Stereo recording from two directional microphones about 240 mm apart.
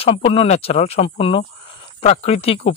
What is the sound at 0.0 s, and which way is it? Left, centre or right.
A man's voice, left.